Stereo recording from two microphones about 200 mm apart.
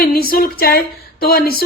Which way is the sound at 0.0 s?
45° left (ahead or behind).